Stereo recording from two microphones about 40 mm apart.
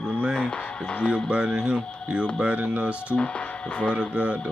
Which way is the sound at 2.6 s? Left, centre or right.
Right.